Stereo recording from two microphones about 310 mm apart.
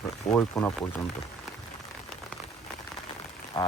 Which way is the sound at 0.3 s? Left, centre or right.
Centre.